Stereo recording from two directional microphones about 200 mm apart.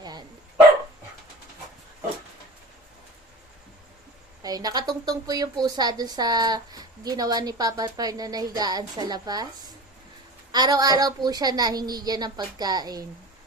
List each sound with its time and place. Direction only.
0.0 s dog: 20° right (ahead or behind)
4.4 s a woman's voice: 20° right (ahead or behind)
10.5 s a woman's voice: 20° right (ahead or behind)